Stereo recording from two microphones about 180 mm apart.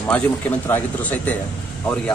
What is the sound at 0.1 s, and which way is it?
A man's voice, 10° left (ahead or behind).